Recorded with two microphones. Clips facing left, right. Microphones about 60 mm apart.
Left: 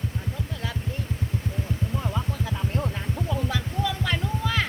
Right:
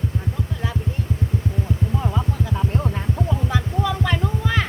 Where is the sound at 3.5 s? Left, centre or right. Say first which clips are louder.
Right 5 dB; right.